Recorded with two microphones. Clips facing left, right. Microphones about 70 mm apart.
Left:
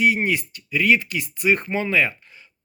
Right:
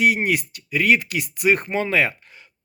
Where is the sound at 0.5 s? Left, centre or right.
Right.